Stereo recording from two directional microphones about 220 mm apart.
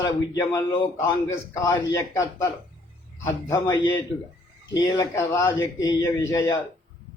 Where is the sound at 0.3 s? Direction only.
15° left (ahead or behind).